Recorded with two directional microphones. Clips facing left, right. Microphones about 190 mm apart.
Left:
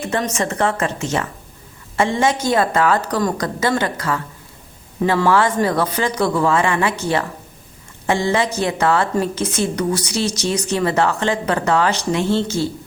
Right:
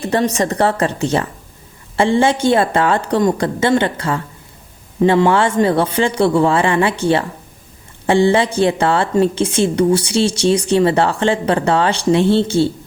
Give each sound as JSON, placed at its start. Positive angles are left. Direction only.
{"t": 0.0, "sound": "a woman's voice", "side_deg": -35}